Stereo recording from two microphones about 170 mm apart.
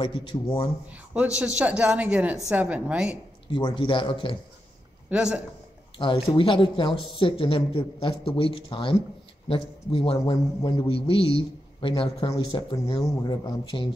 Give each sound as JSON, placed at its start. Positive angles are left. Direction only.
{"t": 0.0, "sound": "speech", "side_deg": 30}
{"t": 1.4, "sound": "a woman's voice", "side_deg": -5}
{"t": 3.5, "sound": "speech", "side_deg": 30}
{"t": 5.1, "sound": "a woman's voice", "side_deg": -5}
{"t": 5.9, "sound": "speech", "side_deg": 30}